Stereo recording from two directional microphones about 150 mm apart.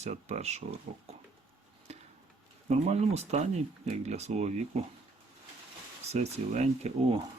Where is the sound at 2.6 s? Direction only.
45° right (ahead or behind).